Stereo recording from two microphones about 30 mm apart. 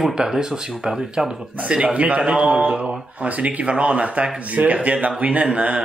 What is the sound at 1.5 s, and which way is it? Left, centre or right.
Speech, right.